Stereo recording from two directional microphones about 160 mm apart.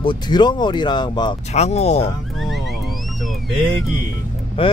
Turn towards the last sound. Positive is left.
turn(degrees=35)  # may be behind; listen again after turning